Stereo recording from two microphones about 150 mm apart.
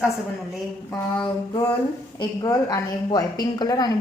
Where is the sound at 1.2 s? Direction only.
35° left (ahead or behind).